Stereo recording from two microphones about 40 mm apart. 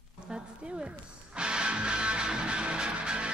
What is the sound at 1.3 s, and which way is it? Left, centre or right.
Music, right.